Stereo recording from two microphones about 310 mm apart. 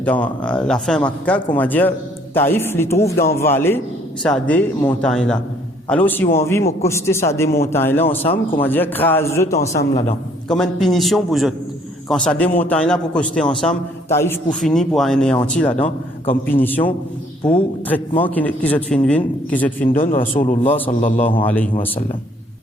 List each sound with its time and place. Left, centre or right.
0.0 s a man's voice: centre
9.6 s a man's voice: left
10.5 s speech: centre
19.9 s a man's voice: left
21.4 s speech: centre